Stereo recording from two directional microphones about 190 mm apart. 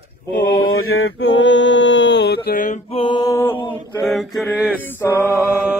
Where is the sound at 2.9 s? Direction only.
25° left (ahead or behind).